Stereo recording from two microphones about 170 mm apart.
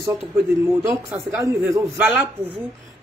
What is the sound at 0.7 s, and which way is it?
A man's voice, 15° right (ahead or behind).